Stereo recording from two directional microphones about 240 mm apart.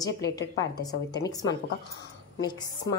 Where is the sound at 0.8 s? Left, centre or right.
Centre.